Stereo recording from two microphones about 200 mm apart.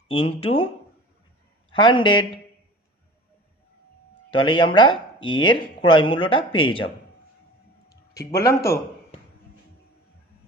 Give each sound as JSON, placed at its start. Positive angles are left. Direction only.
{"t": 0.1, "sound": "speech", "side_deg": 30}
{"t": 1.7, "sound": "speech", "side_deg": 25}
{"t": 4.3, "sound": "speech", "side_deg": 25}
{"t": 8.1, "sound": "speech", "side_deg": 15}